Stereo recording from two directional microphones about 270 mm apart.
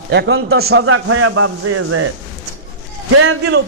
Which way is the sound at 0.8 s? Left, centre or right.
Right.